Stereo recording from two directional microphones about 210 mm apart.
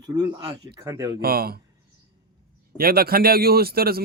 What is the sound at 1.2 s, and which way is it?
Speech, 45° right (ahead or behind).